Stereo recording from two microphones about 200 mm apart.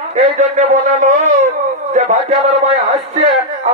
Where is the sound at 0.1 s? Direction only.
35° right (ahead or behind).